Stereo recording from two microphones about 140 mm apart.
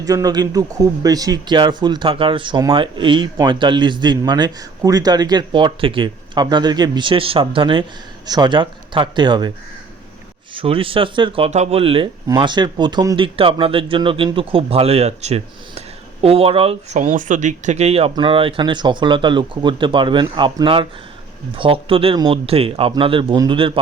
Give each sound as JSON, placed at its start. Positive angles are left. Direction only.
{"t": 0.0, "sound": "speech", "side_deg": -25}
{"t": 10.5, "sound": "speech", "side_deg": -40}
{"t": 17.0, "sound": "speech", "side_deg": -65}